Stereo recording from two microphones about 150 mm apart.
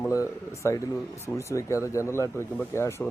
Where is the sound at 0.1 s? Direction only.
20° left (ahead or behind).